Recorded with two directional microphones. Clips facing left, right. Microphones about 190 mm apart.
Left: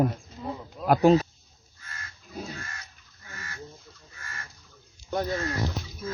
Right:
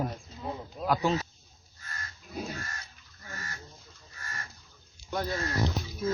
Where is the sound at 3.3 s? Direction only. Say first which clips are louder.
Right 1 dB; 40° right (ahead or behind).